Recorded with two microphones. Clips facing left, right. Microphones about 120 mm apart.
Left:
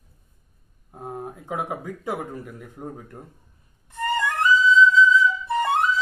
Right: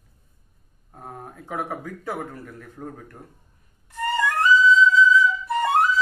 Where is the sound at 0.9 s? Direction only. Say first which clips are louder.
Left 5 dB; 15° left (ahead or behind).